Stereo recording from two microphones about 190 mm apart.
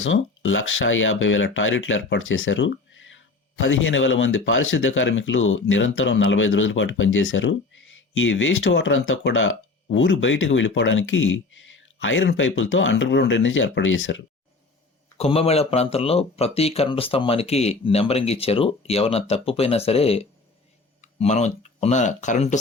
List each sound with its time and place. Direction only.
0.0 s speech: 90° left
15.2 s speech: 30° left (ahead or behind)